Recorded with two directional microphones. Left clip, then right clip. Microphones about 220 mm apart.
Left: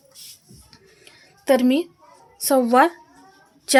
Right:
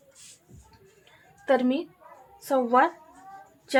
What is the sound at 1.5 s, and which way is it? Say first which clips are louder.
Speech: left 6 dB; 55° left (ahead or behind).